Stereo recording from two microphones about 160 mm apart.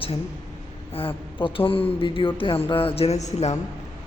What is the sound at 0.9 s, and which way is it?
Speech, 35° left (ahead or behind).